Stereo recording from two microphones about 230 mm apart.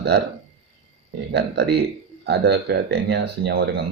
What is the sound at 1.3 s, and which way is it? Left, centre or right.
Speech, right.